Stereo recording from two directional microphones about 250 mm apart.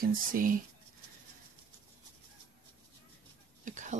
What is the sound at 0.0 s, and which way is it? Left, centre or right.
Speech, right.